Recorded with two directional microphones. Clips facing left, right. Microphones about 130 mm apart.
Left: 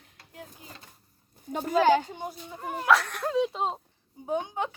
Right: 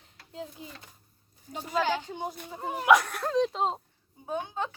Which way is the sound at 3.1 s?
5° left (ahead or behind).